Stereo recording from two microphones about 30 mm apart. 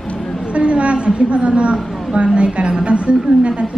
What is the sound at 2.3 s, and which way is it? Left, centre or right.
A woman's voice, right.